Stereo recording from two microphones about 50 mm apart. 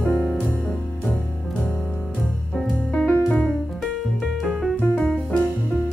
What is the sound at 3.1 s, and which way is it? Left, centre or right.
Music, left.